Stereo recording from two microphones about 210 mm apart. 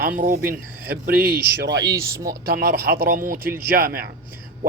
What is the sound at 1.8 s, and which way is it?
Speech, 15° right (ahead or behind).